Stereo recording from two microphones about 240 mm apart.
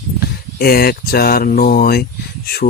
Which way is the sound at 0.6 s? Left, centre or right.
Left.